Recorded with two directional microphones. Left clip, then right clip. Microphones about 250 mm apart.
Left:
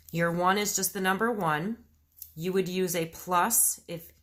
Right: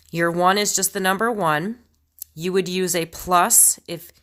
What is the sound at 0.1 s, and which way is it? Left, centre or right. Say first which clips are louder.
A woman's voice: right 8 dB; right.